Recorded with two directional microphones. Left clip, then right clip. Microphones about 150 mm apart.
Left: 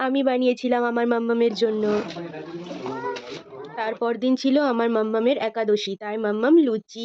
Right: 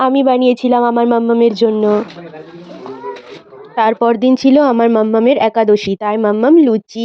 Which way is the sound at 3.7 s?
60° right (ahead or behind).